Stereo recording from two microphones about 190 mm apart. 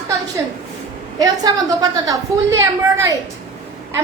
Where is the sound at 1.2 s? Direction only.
20° right (ahead or behind).